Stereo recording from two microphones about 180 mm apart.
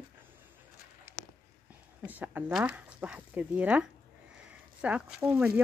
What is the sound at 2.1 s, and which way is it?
Speech, 10° right (ahead or behind).